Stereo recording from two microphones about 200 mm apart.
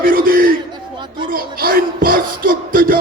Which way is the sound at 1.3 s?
45° right (ahead or behind).